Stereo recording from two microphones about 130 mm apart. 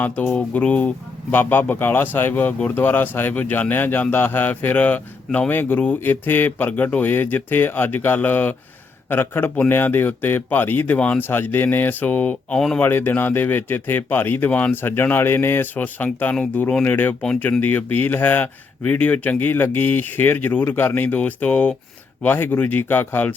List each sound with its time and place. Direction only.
0.0 s speech: 15° left (ahead or behind)